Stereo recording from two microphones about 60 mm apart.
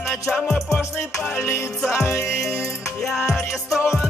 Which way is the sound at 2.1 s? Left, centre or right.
Left.